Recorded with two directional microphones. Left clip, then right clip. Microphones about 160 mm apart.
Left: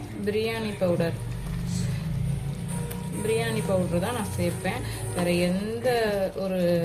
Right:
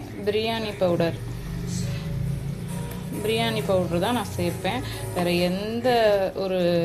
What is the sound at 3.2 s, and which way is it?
A woman's voice, 15° right (ahead or behind).